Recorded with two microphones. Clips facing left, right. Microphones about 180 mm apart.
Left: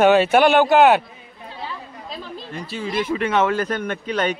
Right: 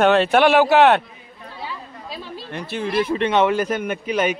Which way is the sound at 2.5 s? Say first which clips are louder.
Right 3 dB; 60° right (ahead or behind).